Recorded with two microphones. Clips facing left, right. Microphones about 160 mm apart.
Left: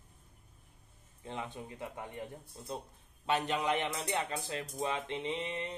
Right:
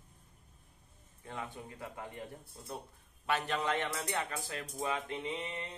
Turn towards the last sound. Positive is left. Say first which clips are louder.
# left 3 dB
turn(degrees=25)  # may be behind; listen again after turning